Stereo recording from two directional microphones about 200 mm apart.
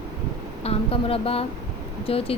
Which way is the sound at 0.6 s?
30° left (ahead or behind).